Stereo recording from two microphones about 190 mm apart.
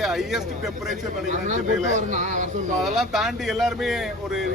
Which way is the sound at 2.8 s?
Centre (ahead or behind).